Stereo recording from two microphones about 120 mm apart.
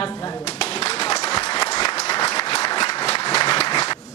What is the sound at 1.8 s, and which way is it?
Applause, 60° left (ahead or behind).